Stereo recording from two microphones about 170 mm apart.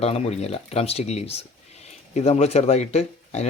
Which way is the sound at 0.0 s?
40° left (ahead or behind).